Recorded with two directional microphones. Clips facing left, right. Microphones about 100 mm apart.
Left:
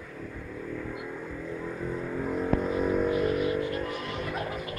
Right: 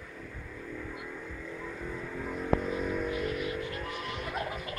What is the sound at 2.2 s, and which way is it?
Vehicle, 40° left (ahead or behind).